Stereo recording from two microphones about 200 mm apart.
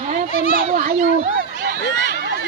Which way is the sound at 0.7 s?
45° right (ahead or behind).